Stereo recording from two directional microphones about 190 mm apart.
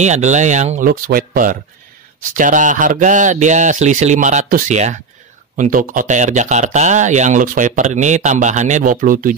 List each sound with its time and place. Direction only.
0.0 s speech: 40° right (ahead or behind)